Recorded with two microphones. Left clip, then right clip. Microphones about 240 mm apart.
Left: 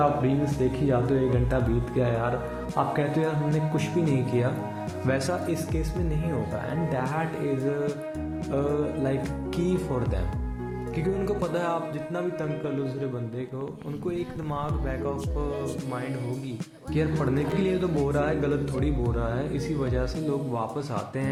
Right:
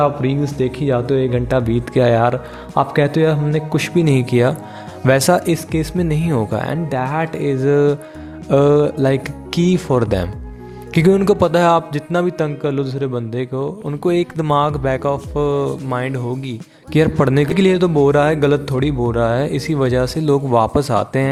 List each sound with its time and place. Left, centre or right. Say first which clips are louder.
0.0 s a man's voice: right 7 dB; right